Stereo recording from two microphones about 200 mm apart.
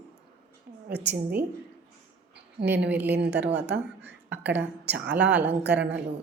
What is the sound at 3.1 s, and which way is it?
Speech, 55° right (ahead or behind).